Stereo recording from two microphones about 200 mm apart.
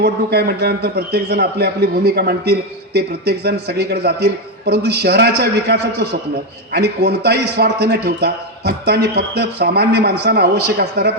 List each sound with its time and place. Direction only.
0.0 s a man's voice: 55° right (ahead or behind)